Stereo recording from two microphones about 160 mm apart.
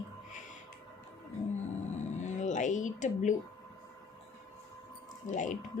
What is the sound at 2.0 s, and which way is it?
Music, 50° left (ahead or behind).